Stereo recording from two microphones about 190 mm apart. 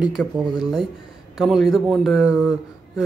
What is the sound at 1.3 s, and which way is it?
Speech, centre (ahead or behind).